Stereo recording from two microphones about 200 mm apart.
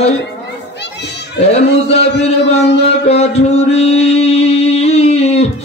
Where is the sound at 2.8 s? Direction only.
30° left (ahead or behind).